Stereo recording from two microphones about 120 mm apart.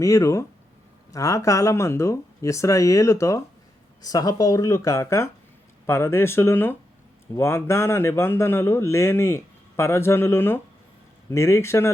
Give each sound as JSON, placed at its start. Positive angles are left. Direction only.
{"t": 0.0, "sound": "speech", "side_deg": 25}